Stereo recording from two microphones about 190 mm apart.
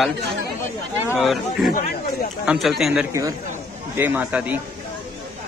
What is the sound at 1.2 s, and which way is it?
Speech, centre (ahead or behind).